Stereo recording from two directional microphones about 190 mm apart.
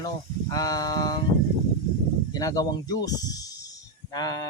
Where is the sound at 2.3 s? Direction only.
20° left (ahead or behind).